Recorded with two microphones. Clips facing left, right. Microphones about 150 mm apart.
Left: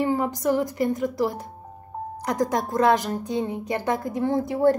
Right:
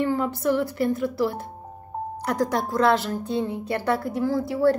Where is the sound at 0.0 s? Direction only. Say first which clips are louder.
Even; 15° left (ahead or behind).